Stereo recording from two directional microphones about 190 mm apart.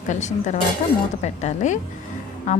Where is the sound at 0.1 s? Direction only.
40° left (ahead or behind).